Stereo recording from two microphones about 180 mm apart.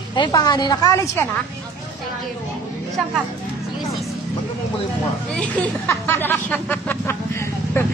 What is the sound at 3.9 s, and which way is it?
Music, centre (ahead or behind).